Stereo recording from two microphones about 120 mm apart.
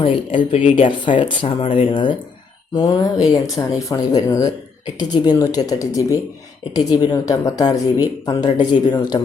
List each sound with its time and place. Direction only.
0.0 s speech: 45° left (ahead or behind)
0.5 s speech: 60° left (ahead or behind)
0.9 s speech: 45° left (ahead or behind)